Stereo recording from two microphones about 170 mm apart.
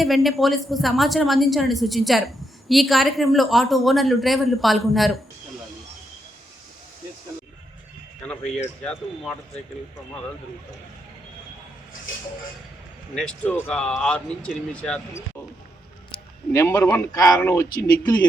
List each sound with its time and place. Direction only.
0.0 s a woman's voice: centre (ahead or behind)
8.8 s a woman's voice: 5° left (ahead or behind)
13.1 s a woman's voice: 5° left (ahead or behind)
16.5 s speech: 15° left (ahead or behind)